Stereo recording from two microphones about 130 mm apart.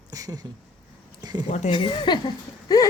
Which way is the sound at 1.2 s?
30° right (ahead or behind).